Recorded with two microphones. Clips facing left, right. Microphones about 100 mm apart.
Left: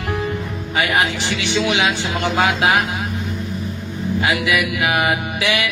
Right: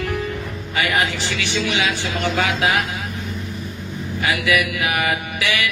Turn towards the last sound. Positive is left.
turn(degrees=20)  # may be behind; listen again after turning